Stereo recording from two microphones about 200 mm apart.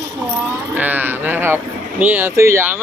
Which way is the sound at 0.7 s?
10° right (ahead or behind).